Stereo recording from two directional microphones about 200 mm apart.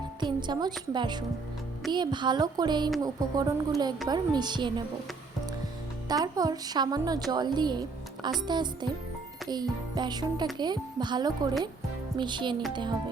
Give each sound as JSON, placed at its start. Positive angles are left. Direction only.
{"t": 0.2, "sound": "a woman's voice", "side_deg": -20}
{"t": 6.1, "sound": "a woman's voice", "side_deg": -20}